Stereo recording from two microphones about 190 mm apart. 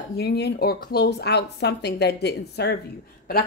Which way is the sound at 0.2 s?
60° left (ahead or behind).